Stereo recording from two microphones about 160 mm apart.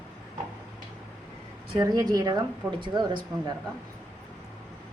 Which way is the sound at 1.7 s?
25° right (ahead or behind).